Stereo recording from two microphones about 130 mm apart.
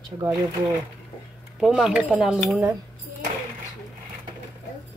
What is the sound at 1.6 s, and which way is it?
Speech, 5° right (ahead or behind).